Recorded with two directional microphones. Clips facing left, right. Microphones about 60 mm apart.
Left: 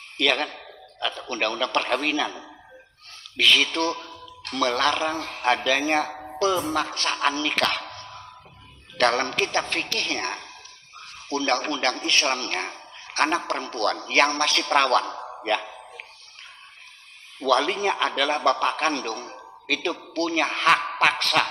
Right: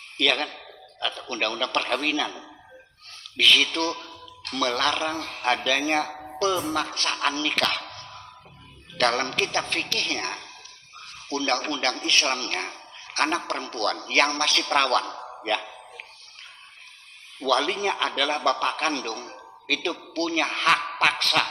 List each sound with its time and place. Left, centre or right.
0.2 s a man's voice: left
15.4 s a sound: left
17.4 s a man's voice: left